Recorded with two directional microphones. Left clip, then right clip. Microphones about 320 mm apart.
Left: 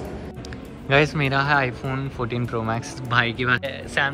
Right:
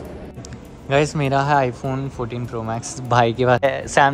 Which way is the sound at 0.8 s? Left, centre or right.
Centre.